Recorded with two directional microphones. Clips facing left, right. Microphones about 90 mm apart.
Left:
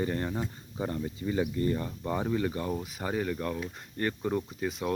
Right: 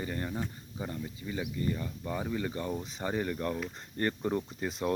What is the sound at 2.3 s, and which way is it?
Speech, 10° left (ahead or behind).